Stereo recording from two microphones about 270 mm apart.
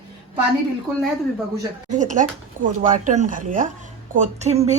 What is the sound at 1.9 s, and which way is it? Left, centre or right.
Speech, right.